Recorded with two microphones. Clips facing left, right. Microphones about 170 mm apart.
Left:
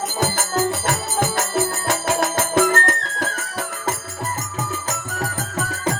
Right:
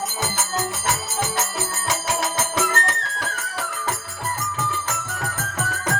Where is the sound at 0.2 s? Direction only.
55° left (ahead or behind).